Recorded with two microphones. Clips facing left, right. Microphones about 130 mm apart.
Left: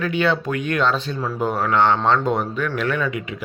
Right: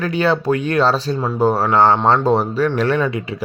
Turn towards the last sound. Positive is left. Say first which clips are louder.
# right 5 dB
turn(degrees=-35)  # may be behind; listen again after turning